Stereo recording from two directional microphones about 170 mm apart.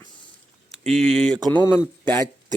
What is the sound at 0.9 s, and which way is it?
Speech, 5° left (ahead or behind).